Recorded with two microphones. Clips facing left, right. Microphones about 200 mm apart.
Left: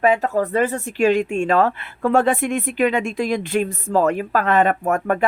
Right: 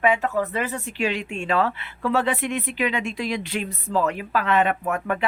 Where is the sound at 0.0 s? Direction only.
40° left (ahead or behind).